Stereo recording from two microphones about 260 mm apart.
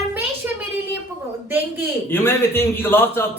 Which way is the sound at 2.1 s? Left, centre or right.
Centre.